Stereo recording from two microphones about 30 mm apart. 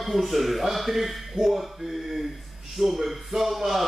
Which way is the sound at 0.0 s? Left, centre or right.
Centre.